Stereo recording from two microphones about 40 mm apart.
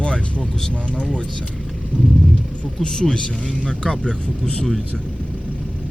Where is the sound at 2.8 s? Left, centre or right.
Left.